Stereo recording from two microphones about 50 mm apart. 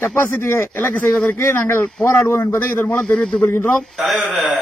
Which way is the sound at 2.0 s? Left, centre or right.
Left.